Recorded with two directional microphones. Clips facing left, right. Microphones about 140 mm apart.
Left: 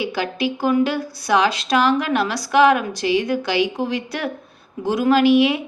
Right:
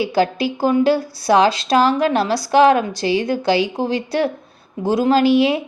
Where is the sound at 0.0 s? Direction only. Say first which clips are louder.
Right 5 dB; 35° right (ahead or behind).